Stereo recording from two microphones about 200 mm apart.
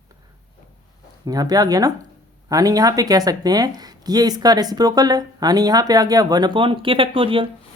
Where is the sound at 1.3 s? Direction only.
20° right (ahead or behind).